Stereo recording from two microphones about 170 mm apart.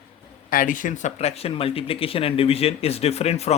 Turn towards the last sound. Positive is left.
turn(degrees=40)  # may be behind; listen again after turning